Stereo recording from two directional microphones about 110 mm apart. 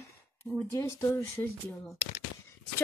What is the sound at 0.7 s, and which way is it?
Speech, 25° left (ahead or behind).